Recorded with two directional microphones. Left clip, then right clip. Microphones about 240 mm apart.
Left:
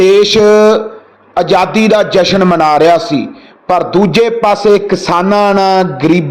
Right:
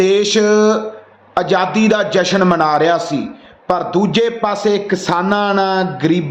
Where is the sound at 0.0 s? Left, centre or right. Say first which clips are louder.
Left 6 dB; left.